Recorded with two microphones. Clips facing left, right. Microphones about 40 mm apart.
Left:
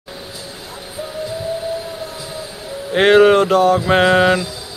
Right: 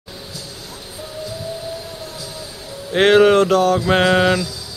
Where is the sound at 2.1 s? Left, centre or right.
Left.